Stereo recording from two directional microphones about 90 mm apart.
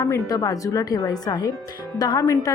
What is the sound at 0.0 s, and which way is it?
A woman's voice, 40° left (ahead or behind).